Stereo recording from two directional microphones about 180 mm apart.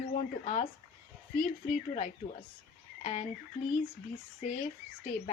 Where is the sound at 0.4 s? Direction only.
40° left (ahead or behind).